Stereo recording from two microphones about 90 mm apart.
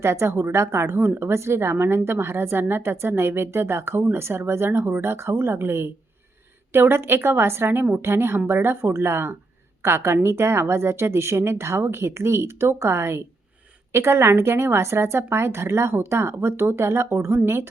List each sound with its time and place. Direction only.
0.0 s a woman's voice: 30° right (ahead or behind)